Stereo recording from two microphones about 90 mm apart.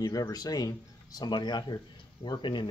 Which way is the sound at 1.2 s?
55° left (ahead or behind).